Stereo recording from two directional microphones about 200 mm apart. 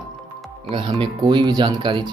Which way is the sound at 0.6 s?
30° right (ahead or behind).